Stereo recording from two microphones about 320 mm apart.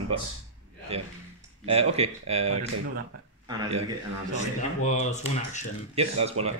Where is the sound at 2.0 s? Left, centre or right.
Centre.